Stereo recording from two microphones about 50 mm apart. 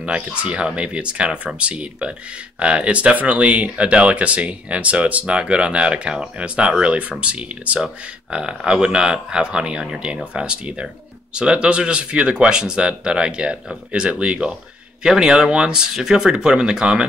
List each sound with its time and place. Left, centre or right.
0.0 s speech: right; by 10.2 s centre
10.3 s speech: centre